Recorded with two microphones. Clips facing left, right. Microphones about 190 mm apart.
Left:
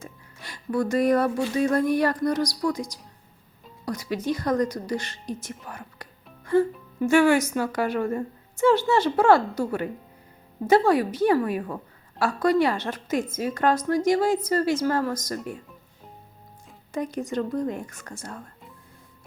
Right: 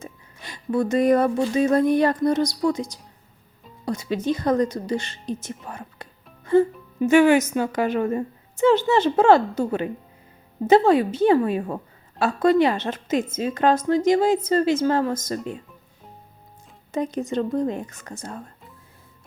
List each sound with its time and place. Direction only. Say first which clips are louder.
0.0 s a woman's voice: right 3 dB; 20° right (ahead or behind)
16.9 s a woman's voice: right 3 dB; 25° right (ahead or behind)